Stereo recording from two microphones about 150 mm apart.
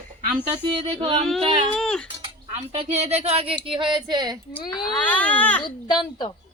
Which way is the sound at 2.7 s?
40° right (ahead or behind).